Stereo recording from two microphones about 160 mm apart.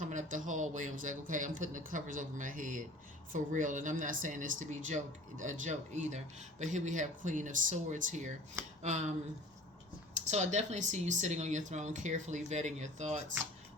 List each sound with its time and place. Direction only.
0.0 s speech: 50° right (ahead or behind)
10.2 s speech: 45° right (ahead or behind)